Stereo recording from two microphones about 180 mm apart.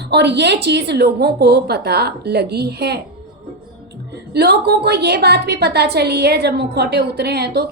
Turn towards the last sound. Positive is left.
turn(degrees=-65)  # may be behind; listen again after turning